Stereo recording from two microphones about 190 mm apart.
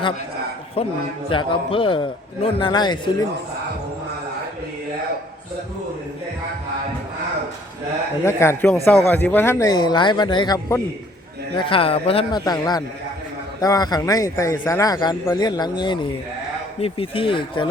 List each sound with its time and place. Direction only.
0.8 s a man's voice: 30° left (ahead or behind)
8.2 s a man's voice: 15° left (ahead or behind)